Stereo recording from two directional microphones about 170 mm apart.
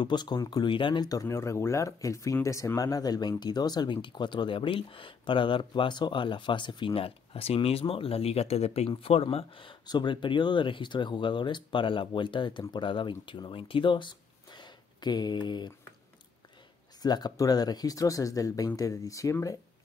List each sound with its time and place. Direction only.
0.0 s speech: 25° left (ahead or behind)
17.0 s speech: 25° left (ahead or behind)